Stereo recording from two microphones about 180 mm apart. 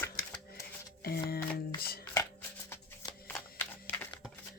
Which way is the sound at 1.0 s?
60° left (ahead or behind).